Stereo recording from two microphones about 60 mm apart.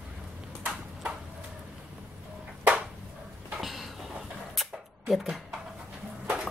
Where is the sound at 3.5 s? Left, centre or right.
Centre.